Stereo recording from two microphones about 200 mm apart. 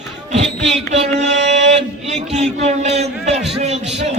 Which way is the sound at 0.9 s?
35° right (ahead or behind).